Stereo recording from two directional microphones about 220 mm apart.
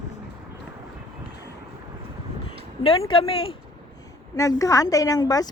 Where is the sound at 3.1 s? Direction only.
25° left (ahead or behind).